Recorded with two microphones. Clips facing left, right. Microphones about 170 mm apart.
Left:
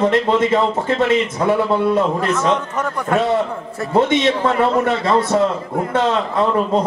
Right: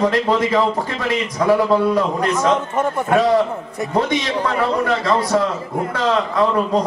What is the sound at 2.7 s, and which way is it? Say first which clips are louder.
Speech: right 2 dB; 25° right (ahead or behind).